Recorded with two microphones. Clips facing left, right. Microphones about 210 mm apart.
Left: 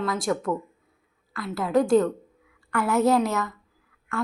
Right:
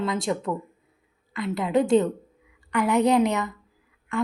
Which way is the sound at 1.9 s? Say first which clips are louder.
Even; 20° right (ahead or behind).